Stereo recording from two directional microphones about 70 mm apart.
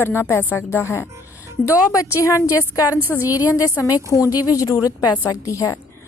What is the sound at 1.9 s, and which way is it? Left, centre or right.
A woman's voice, left.